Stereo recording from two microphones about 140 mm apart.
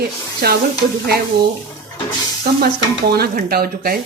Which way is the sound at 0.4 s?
90° right.